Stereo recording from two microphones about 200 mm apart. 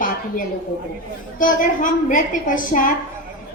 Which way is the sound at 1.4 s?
40° left (ahead or behind).